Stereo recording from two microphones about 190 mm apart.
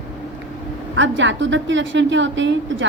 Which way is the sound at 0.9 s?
75° right (ahead or behind).